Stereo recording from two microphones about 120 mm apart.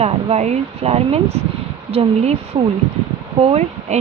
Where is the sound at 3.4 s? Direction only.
65° right (ahead or behind).